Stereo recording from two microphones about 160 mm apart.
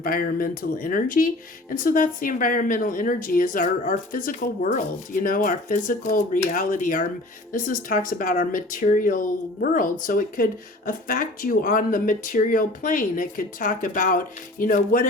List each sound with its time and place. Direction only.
0.0 s speech: 65° left (ahead or behind)